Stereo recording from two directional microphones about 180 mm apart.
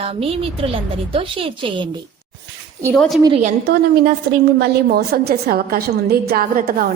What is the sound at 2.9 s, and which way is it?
Speech, centre (ahead or behind).